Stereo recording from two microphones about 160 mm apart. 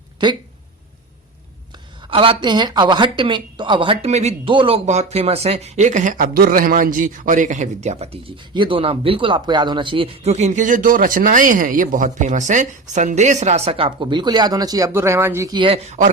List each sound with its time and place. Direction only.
0.2 s speech: 25° right (ahead or behind)
2.0 s a woman's voice: 35° right (ahead or behind); by 15.5 s 15° right (ahead or behind)
15.5 s a woman's voice: 35° right (ahead or behind)